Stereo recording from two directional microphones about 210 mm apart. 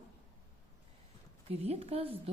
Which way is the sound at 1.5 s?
30° right (ahead or behind).